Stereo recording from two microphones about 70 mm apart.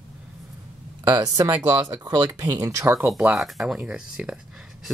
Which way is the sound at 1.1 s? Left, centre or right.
Right.